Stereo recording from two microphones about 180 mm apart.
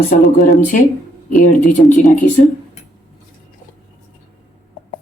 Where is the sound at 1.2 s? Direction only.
45° left (ahead or behind).